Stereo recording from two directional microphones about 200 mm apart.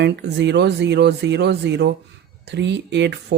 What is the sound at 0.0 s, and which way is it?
Speech, 60° right (ahead or behind).